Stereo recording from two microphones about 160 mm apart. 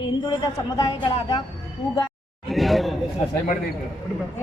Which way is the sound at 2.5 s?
Centre (ahead or behind).